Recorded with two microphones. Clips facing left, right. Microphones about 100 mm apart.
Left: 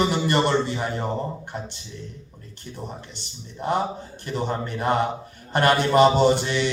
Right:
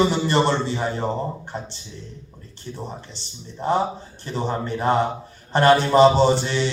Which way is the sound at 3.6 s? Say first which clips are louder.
Right 3 dB; 35° right (ahead or behind).